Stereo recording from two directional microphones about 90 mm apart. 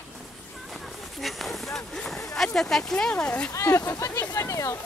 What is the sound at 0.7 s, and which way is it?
Speech, centre (ahead or behind).